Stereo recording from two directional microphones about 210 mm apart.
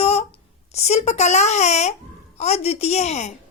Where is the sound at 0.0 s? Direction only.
30° left (ahead or behind).